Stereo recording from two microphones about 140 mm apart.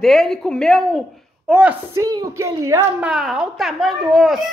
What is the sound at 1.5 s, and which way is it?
Speech, 10° right (ahead or behind).